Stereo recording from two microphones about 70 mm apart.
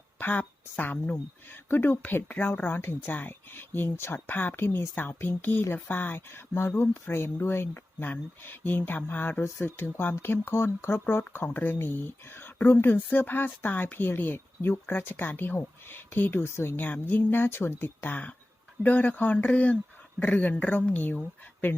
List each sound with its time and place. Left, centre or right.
0.2 s a woman's voice: left